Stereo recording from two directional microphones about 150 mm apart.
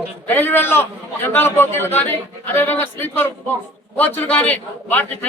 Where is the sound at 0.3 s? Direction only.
10° left (ahead or behind).